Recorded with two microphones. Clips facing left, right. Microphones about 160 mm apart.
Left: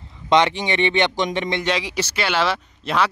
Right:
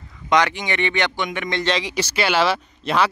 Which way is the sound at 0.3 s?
25° left (ahead or behind).